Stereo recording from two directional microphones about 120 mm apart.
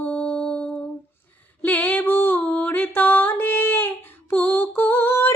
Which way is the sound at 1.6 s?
10° left (ahead or behind).